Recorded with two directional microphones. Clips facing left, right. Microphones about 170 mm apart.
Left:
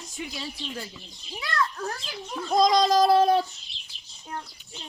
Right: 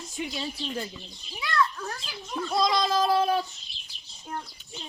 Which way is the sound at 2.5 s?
40° left (ahead or behind).